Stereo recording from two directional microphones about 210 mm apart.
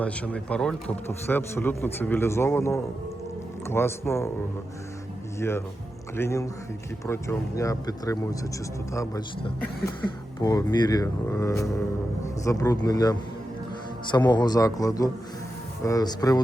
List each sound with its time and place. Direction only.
0.0 s speech: 5° left (ahead or behind)
5.4 s speech: 10° left (ahead or behind)